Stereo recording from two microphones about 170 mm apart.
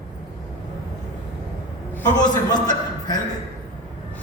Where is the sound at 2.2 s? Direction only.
25° left (ahead or behind).